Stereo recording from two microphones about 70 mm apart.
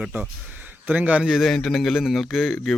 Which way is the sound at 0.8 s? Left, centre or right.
Right.